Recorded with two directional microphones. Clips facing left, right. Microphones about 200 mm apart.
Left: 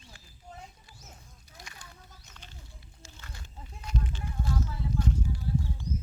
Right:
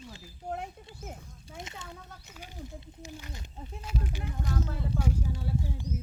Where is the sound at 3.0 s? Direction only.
15° right (ahead or behind).